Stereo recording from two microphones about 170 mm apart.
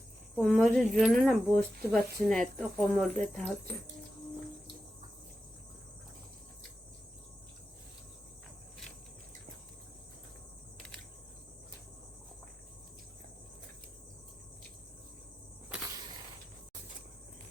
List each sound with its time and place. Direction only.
0.3 s speech: centre (ahead or behind)